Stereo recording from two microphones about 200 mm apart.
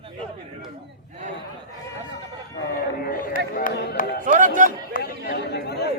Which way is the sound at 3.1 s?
45° left (ahead or behind).